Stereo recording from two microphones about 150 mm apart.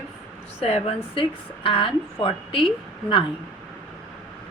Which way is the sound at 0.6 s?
45° left (ahead or behind).